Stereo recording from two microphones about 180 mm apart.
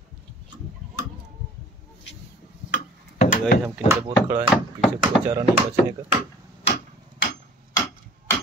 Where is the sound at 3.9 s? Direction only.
15° right (ahead or behind).